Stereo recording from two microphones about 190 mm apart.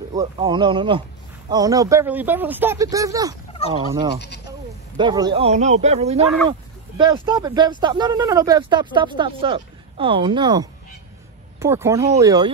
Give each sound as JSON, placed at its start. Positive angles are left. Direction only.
{"t": 0.1, "sound": "speech", "side_deg": -20}
{"t": 4.9, "sound": "speech", "side_deg": -20}
{"t": 5.4, "sound": "speech", "side_deg": -35}
{"t": 6.2, "sound": "speech", "side_deg": 0}
{"t": 7.2, "sound": "speech", "side_deg": -20}